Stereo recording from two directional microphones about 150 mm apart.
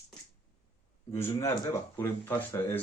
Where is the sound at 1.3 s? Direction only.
20° left (ahead or behind).